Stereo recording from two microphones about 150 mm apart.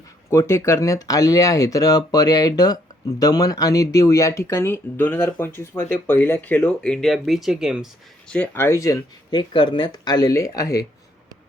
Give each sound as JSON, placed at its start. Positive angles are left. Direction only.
{"t": 0.3, "sound": "speech", "side_deg": 20}
{"t": 8.3, "sound": "speech", "side_deg": 10}